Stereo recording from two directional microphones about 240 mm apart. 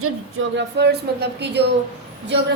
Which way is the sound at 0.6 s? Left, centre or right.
Right.